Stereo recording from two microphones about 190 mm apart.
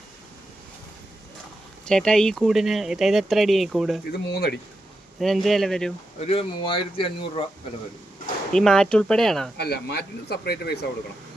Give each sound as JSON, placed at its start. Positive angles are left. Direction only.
{"t": 1.8, "sound": "speech", "side_deg": 5}
{"t": 4.1, "sound": "speech", "side_deg": 55}
{"t": 5.2, "sound": "speech", "side_deg": 0}
{"t": 6.1, "sound": "speech", "side_deg": 30}
{"t": 8.5, "sound": "speech", "side_deg": 5}
{"t": 9.6, "sound": "speech", "side_deg": 60}